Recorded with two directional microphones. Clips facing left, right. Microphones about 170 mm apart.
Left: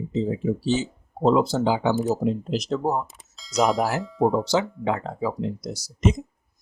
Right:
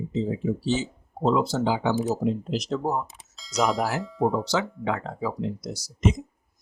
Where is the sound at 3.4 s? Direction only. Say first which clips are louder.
Left 3 dB; centre (ahead or behind).